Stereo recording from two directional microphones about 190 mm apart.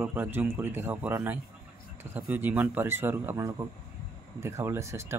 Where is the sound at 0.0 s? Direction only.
10° right (ahead or behind).